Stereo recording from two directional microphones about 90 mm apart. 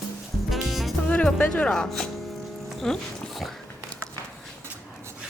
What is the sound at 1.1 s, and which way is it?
Music, 10° left (ahead or behind).